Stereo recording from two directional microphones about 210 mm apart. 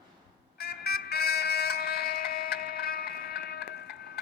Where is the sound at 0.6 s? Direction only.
50° left (ahead or behind).